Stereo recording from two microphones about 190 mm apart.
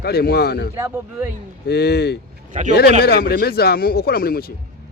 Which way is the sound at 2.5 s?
40° right (ahead or behind).